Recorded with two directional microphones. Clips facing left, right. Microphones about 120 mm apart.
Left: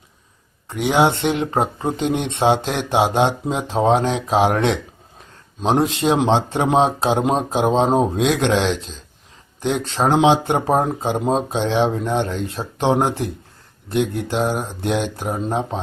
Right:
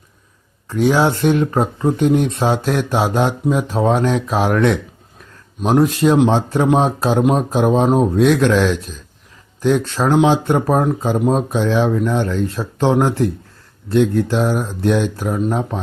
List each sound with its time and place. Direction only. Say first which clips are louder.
0.7 s speech: right 2 dB; 20° left (ahead or behind)